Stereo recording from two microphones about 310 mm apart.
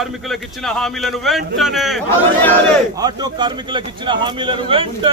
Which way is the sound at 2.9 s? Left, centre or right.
Centre.